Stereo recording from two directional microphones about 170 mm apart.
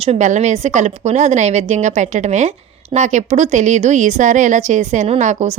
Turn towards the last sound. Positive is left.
turn(degrees=-45)  # may be behind; listen again after turning